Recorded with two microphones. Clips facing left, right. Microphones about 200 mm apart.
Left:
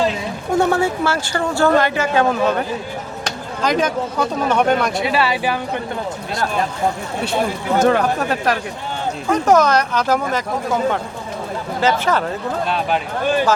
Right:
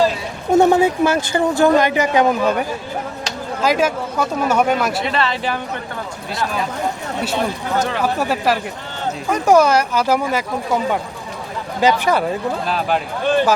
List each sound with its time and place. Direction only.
0.5 s speech: 20° right (ahead or behind)
5.0 s speech: 10° left (ahead or behind)
7.8 s speech: 50° left (ahead or behind)
8.2 s speech: 5° right (ahead or behind)
11.8 s speech: 15° right (ahead or behind)
12.6 s speech: centre (ahead or behind)